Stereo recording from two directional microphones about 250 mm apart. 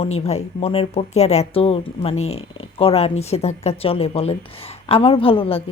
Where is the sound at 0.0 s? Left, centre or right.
Left.